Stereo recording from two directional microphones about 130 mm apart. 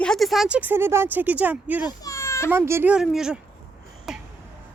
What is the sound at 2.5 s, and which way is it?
Speech, 20° right (ahead or behind).